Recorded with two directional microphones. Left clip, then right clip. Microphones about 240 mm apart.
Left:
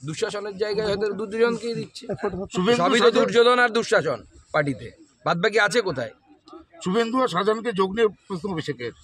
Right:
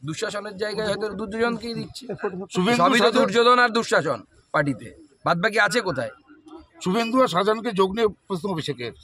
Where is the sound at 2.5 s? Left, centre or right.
Right.